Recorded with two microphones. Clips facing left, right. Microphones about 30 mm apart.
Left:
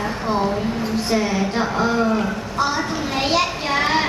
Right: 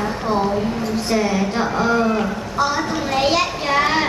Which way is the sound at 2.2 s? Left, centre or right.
Centre.